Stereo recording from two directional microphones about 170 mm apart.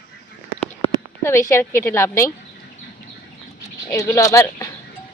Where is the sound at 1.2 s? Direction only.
15° left (ahead or behind).